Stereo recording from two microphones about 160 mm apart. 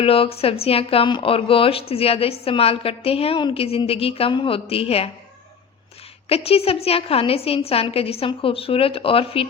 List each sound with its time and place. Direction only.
0.0 s speech: 35° left (ahead or behind)
6.2 s speech: 40° left (ahead or behind)